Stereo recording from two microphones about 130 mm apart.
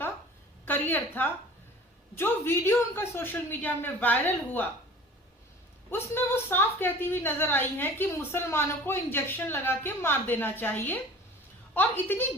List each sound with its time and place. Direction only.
0.6 s a sound: 15° left (ahead or behind)
2.1 s a woman's voice: 15° left (ahead or behind)
5.9 s a woman's voice: 15° left (ahead or behind)